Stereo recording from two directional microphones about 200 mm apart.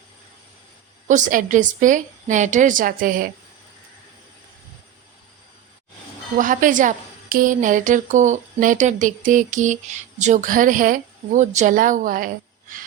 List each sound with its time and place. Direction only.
1.0 s a woman's voice: 40° right (ahead or behind)
6.3 s a woman's voice: 40° right (ahead or behind)